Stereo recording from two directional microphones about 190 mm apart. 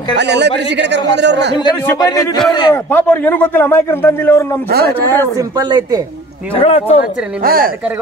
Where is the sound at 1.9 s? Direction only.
20° left (ahead or behind).